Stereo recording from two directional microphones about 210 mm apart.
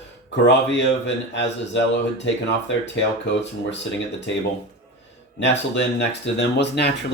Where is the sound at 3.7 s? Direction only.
60° left (ahead or behind).